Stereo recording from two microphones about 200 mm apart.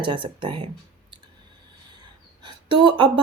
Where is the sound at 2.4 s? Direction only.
25° right (ahead or behind).